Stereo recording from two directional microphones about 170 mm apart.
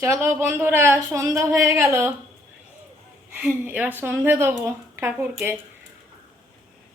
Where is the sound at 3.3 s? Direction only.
10° right (ahead or behind).